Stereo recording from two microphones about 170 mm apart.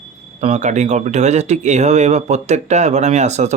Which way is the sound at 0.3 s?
45° right (ahead or behind).